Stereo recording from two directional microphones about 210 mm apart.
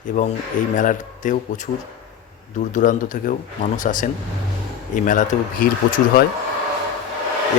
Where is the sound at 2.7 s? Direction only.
40° left (ahead or behind).